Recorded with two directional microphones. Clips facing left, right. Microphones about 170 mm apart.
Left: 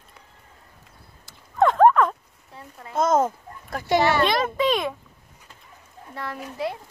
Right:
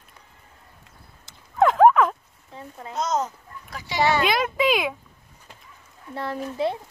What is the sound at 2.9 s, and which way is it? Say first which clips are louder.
A child's voice: left 5 dB; 50° left (ahead or behind).